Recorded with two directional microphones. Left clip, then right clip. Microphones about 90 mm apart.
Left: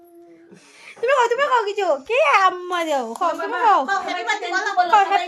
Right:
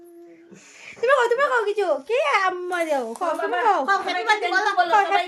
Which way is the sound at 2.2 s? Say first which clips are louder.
Left 6 dB; 70° left (ahead or behind).